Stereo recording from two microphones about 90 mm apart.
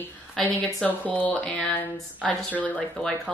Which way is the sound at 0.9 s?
15° left (ahead or behind).